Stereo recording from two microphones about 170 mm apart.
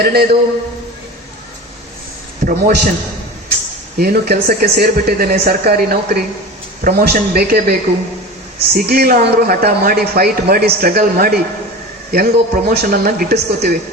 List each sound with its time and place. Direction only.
0.0 s a man's voice: 65° right (ahead or behind)
2.4 s speech: 55° right (ahead or behind)
3.9 s a man's voice: 60° right (ahead or behind)